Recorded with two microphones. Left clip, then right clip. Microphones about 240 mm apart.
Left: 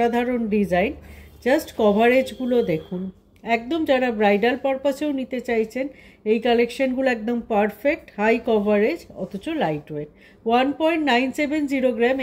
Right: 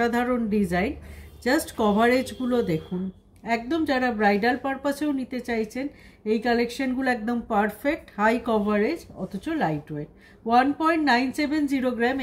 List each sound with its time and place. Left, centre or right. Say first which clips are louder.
0.0 s speech: left 3 dB; right